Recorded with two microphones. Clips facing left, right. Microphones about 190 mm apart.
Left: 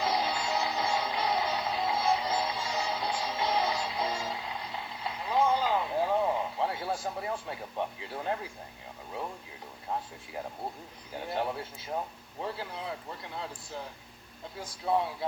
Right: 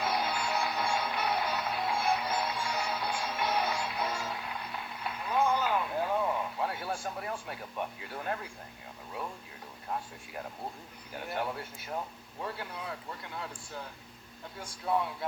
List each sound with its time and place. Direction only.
0.0 s music: 25° left (ahead or behind)
11.1 s speech: 20° left (ahead or behind)